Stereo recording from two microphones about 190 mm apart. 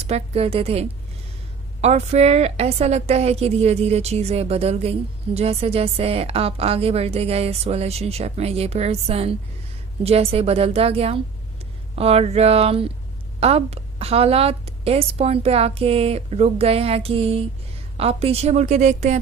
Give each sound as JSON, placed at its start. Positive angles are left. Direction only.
{"t": 0.0, "sound": "a woman's voice", "side_deg": -30}